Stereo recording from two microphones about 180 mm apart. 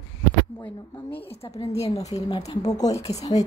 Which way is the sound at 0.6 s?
10° left (ahead or behind).